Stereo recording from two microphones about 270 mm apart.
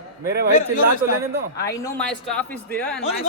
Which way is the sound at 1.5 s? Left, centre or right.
Centre.